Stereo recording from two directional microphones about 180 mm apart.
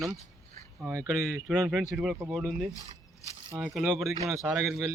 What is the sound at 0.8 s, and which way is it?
Speech, 15° right (ahead or behind).